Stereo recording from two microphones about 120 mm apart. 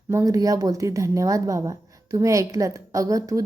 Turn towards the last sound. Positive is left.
turn(degrees=-30)  # may be behind; listen again after turning